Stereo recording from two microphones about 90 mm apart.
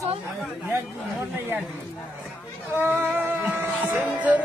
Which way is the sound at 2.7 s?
25° right (ahead or behind).